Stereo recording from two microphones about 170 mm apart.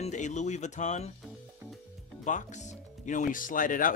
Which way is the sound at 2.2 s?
45° left (ahead or behind).